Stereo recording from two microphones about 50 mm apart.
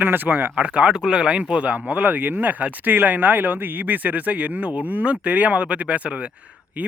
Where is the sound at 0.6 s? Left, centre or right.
Right.